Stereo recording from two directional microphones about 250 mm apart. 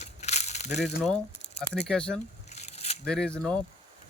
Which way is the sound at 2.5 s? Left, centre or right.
Left.